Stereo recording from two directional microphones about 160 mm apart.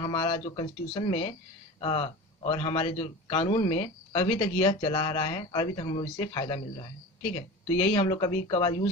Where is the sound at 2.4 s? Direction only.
35° left (ahead or behind).